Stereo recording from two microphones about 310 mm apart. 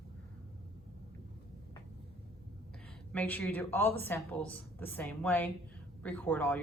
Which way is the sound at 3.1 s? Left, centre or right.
Centre.